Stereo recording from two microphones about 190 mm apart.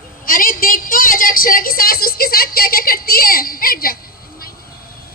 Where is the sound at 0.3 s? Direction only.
50° left (ahead or behind).